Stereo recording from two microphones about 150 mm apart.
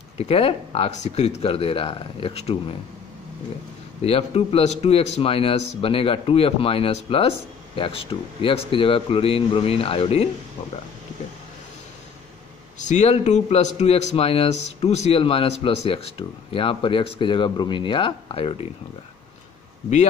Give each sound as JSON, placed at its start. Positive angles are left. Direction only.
{"t": 0.2, "sound": "a man's voice", "side_deg": 40}
{"t": 4.0, "sound": "a man's voice", "side_deg": 40}
{"t": 12.7, "sound": "a man's voice", "side_deg": 55}